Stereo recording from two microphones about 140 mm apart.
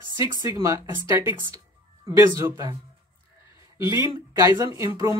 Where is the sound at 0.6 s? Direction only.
20° right (ahead or behind).